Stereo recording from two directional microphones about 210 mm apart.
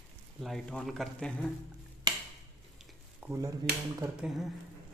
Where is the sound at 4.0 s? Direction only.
5° right (ahead or behind).